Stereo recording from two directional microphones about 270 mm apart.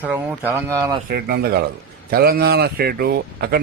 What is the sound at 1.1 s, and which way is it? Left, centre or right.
A man's voice, right.